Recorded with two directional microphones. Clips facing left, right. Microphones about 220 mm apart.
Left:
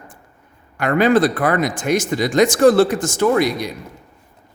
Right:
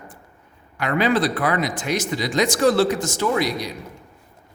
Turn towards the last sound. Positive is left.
turn(degrees=55)  # may be behind; listen again after turning